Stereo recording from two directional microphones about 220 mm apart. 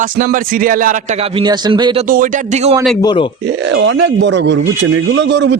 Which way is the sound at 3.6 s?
55° right (ahead or behind).